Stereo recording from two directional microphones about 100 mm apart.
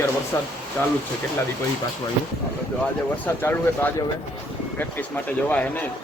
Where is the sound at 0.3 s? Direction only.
30° left (ahead or behind).